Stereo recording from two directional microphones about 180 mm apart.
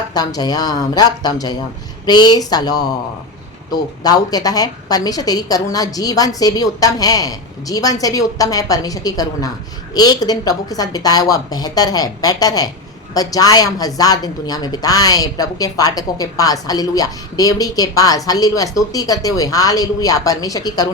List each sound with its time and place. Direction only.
0.1 s a woman's voice: 20° left (ahead or behind)